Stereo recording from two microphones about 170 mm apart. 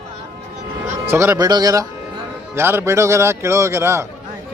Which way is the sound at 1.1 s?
15° right (ahead or behind).